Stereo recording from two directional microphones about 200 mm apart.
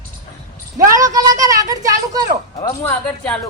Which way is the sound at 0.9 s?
15° right (ahead or behind).